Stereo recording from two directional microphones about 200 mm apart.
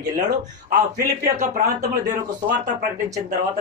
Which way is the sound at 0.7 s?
40° right (ahead or behind).